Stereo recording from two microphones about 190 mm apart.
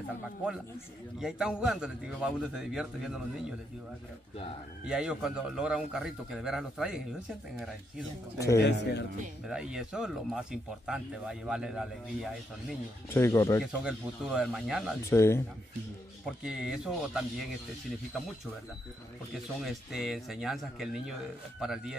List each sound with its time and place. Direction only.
1.2 s speech: 5° right (ahead or behind)
4.8 s speech: 5° right (ahead or behind)
8.5 s speech: 60° left (ahead or behind)
9.5 s speech: 5° right (ahead or behind)
13.1 s speech: 15° left (ahead or behind)
13.6 s speech: 5° right (ahead or behind)
15.0 s speech: 15° left (ahead or behind)
16.3 s speech: 5° right (ahead or behind)
19.6 s speech: centre (ahead or behind)